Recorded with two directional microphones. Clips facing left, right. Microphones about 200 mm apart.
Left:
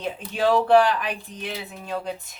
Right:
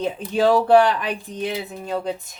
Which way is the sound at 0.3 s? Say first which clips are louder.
Right 3 dB; 40° right (ahead or behind).